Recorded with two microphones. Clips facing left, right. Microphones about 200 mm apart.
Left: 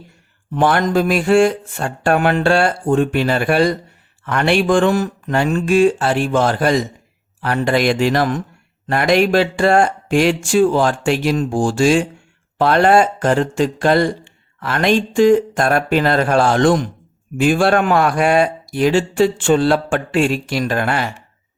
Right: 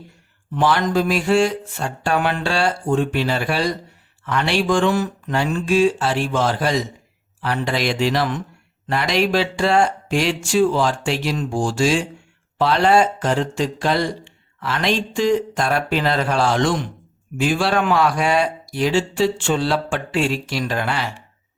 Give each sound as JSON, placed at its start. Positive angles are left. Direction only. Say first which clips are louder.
{"t": 0.5, "sound": "speech", "louder": "left 3 dB", "side_deg": 55}